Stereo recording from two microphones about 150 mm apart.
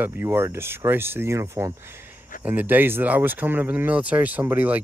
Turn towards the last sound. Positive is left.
turn(degrees=-10)  # may be behind; listen again after turning